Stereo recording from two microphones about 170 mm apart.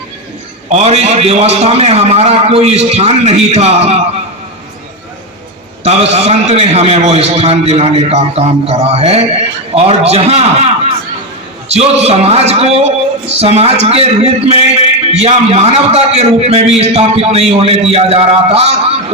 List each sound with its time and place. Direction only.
0.7 s a man's voice: 40° right (ahead or behind)
5.8 s a man's voice: 40° right (ahead or behind)
11.7 s a man's voice: 35° right (ahead or behind)